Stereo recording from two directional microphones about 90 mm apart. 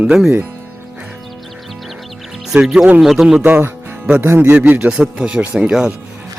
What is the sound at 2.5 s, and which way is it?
Speech, 5° right (ahead or behind).